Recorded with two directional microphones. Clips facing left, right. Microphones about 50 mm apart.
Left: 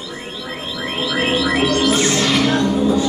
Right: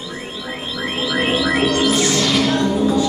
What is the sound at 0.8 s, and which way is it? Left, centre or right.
Music, centre.